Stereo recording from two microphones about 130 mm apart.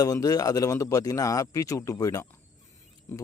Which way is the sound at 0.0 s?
25° left (ahead or behind).